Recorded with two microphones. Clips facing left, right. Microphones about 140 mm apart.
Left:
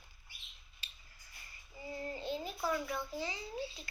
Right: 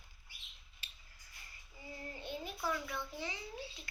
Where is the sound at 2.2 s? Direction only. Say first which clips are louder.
Left 2 dB; 15° right (ahead or behind).